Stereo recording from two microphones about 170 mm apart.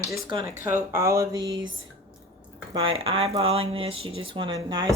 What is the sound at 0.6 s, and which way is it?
Speech, 15° right (ahead or behind).